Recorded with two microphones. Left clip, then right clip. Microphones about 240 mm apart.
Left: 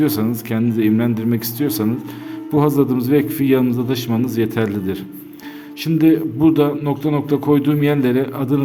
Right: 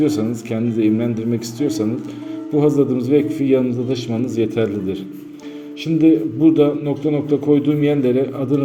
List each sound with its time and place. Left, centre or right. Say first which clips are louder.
0.0 s a man's voice: even; left